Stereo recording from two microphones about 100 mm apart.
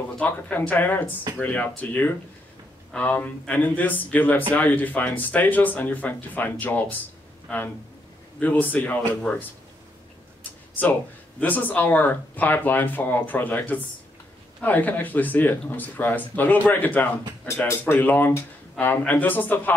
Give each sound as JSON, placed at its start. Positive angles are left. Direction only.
{"t": 0.2, "sound": "speech", "side_deg": 15}
{"t": 10.8, "sound": "speech", "side_deg": 15}